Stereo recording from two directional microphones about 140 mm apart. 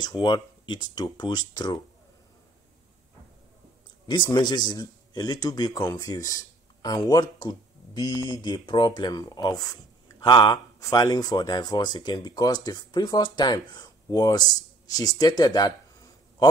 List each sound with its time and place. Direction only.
0.0 s speech: 30° left (ahead or behind)
4.1 s speech: 35° left (ahead or behind)